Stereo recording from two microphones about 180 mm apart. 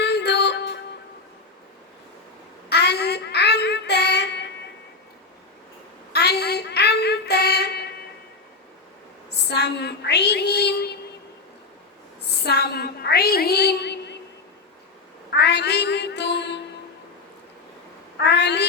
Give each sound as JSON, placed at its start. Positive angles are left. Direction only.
{"t": 0.0, "sound": "music", "side_deg": 70}
{"t": 2.6, "sound": "child singing", "side_deg": 65}
{"t": 6.1, "sound": "child singing", "side_deg": 65}
{"t": 9.5, "sound": "child singing", "side_deg": 70}
{"t": 12.4, "sound": "a sound", "side_deg": 65}
{"t": 15.4, "sound": "a sound", "side_deg": 70}
{"t": 18.2, "sound": "cat", "side_deg": 70}